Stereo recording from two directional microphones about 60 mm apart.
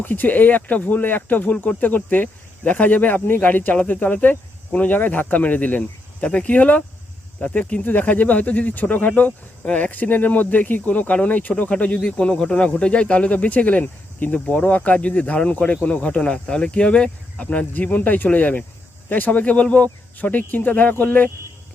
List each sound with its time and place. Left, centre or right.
0.0 s speech: left